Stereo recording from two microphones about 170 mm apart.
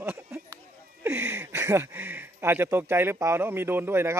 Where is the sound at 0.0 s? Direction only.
15° right (ahead or behind).